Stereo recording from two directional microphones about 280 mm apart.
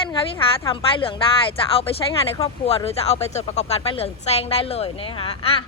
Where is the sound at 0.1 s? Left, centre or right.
Centre.